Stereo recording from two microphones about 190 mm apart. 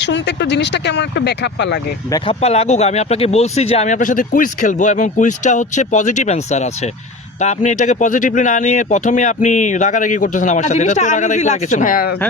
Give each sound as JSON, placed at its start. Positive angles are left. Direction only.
{"t": 0.0, "sound": "speech", "side_deg": 65}
{"t": 2.1, "sound": "speech", "side_deg": 30}